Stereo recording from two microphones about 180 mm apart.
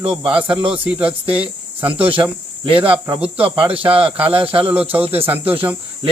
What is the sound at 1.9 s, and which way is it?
Speech, 10° right (ahead or behind).